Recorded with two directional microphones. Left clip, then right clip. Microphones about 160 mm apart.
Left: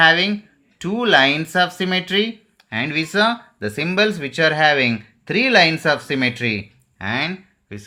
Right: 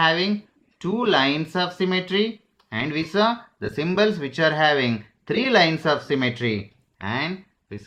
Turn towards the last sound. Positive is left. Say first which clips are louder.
# left 2 dB
turn(degrees=15)  # may be behind; listen again after turning